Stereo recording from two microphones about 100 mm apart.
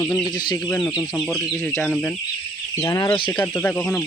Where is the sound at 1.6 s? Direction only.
15° left (ahead or behind).